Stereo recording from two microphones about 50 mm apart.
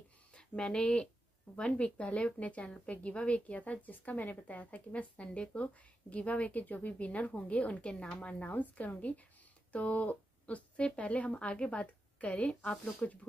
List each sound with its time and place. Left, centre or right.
0.3 s a woman's voice: left